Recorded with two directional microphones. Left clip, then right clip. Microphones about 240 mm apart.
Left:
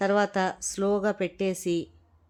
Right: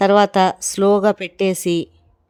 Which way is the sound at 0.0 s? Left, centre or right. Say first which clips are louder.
Right 11 dB; right.